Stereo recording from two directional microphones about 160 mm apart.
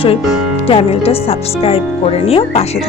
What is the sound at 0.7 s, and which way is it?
Speech, 35° left (ahead or behind).